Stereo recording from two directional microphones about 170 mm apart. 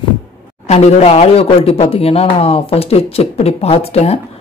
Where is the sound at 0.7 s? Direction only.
40° left (ahead or behind).